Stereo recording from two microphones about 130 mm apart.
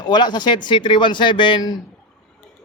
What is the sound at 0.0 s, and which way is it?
Speech, 35° left (ahead or behind).